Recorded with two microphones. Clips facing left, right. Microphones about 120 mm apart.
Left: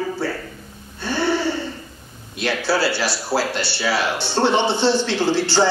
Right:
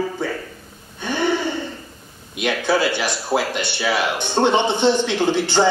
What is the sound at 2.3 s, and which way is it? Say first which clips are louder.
Speech: right 1 dB; 15° right (ahead or behind).